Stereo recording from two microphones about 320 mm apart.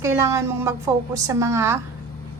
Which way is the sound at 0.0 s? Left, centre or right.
Centre.